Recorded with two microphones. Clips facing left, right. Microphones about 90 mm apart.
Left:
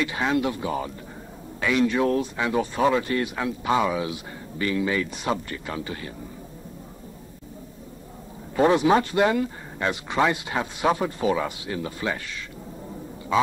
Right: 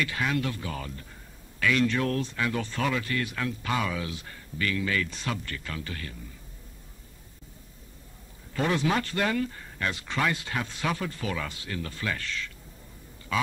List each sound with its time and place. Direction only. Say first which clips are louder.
0.0 s speech: left 5 dB; 25° left (ahead or behind)
8.5 s speech: left 8 dB; 20° left (ahead or behind)
13.3 s a sound: left 7 dB; 25° left (ahead or behind)